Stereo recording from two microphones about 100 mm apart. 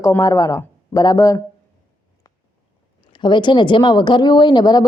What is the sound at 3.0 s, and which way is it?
Speech, 50° left (ahead or behind).